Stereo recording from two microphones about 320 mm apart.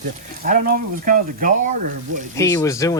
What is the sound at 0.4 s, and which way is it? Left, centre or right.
Speech, right.